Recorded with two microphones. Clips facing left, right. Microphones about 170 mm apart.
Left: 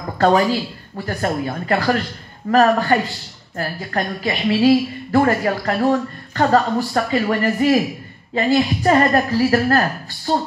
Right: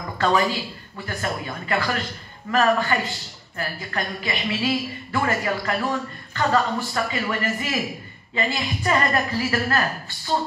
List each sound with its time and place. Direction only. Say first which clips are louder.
0.2 s a woman's voice: left 6 dB; 45° left (ahead or behind)